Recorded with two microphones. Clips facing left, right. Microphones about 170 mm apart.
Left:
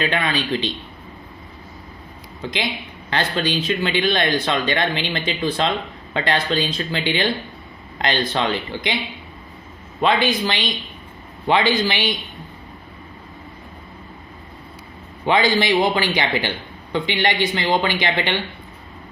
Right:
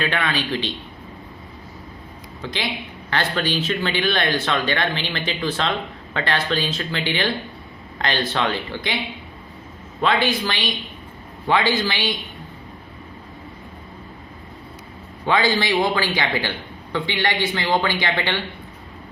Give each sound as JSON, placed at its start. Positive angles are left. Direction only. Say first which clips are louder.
{"t": 0.0, "sound": "speech", "louder": "left 2 dB", "side_deg": 15}
{"t": 2.4, "sound": "speech", "louder": "left 2 dB", "side_deg": 15}
{"t": 10.0, "sound": "speech", "louder": "left 2 dB", "side_deg": 20}
{"t": 15.3, "sound": "speech", "louder": "left 2 dB", "side_deg": 15}